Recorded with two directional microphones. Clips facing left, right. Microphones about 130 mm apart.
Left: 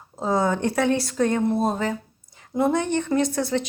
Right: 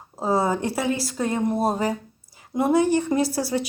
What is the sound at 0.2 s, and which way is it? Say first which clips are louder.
A woman's voice: even; 5° right (ahead or behind).